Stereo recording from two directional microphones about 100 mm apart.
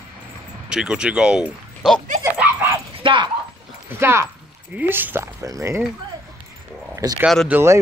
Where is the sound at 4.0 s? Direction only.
25° right (ahead or behind).